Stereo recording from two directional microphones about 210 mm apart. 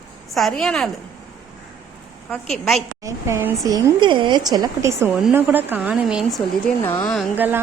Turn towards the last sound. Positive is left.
turn(degrees=-10)  # may be behind; listen again after turning